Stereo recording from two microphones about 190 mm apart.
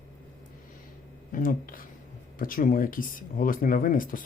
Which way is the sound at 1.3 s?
45° left (ahead or behind).